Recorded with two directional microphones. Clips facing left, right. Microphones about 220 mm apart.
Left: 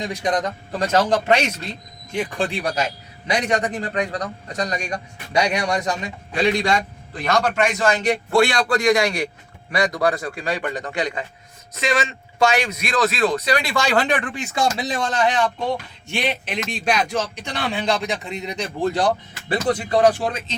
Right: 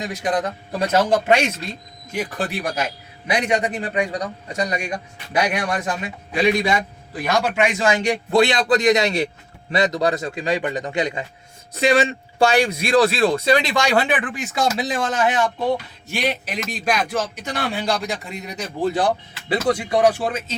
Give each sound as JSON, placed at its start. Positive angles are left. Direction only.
{"t": 0.0, "sound": "a man's voice", "side_deg": -5}
{"t": 11.7, "sound": "a man's voice", "side_deg": -35}